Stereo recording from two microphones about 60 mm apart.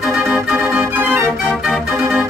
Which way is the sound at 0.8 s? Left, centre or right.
Right.